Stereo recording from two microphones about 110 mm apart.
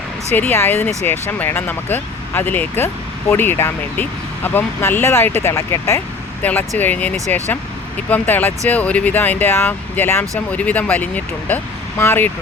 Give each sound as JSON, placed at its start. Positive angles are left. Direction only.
{"t": 0.3, "sound": "speech", "side_deg": 20}
{"t": 6.4, "sound": "speech", "side_deg": 15}